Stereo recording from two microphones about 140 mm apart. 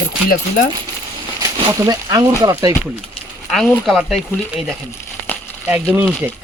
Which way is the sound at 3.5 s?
Centre (ahead or behind).